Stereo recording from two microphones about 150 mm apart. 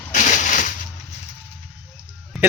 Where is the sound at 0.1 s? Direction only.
55° left (ahead or behind).